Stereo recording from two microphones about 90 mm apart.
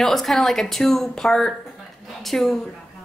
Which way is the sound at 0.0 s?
5° left (ahead or behind).